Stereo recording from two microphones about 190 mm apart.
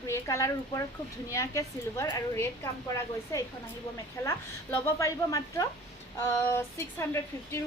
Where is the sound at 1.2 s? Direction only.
15° left (ahead or behind).